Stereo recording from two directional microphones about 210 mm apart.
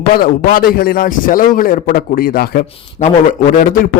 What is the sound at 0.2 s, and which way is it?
A man's voice, 45° left (ahead or behind).